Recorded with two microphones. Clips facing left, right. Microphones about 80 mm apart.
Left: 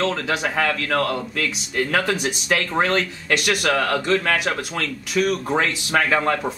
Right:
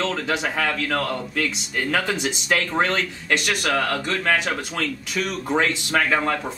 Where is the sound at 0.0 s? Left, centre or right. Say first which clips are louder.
Left 2 dB; centre.